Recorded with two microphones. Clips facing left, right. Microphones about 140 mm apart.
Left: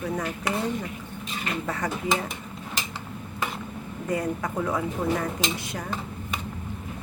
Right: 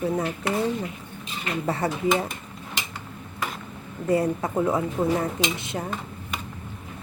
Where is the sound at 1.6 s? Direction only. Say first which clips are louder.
Right 7 dB; 30° right (ahead or behind).